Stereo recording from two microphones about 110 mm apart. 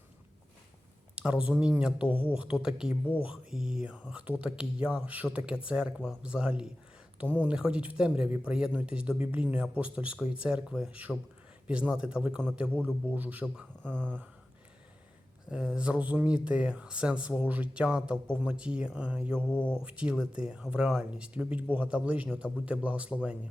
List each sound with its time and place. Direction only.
1.1 s speech: 10° right (ahead or behind)
15.4 s speech: 10° right (ahead or behind)
19.4 s speech: 15° left (ahead or behind)
19.8 s speech: 10° right (ahead or behind)